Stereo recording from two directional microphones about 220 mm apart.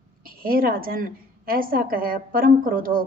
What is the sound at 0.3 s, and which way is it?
A woman's voice, 40° right (ahead or behind).